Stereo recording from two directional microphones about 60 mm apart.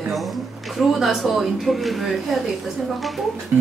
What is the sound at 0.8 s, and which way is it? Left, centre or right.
Speech, centre.